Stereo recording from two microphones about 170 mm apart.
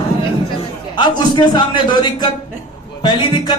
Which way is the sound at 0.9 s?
25° left (ahead or behind).